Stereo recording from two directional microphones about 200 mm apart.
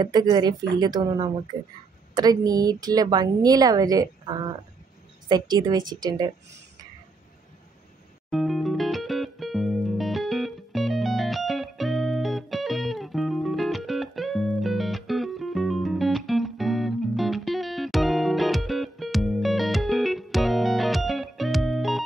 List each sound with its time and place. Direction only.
0.0 s a woman's voice: 20° right (ahead or behind)
8.3 s music: centre (ahead or behind)